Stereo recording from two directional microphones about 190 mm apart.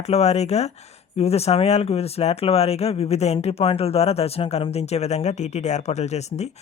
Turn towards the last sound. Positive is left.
turn(degrees=35)  # may be behind; listen again after turning